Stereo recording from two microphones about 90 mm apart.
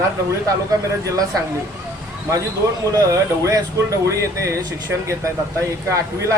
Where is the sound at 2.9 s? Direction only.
40° right (ahead or behind).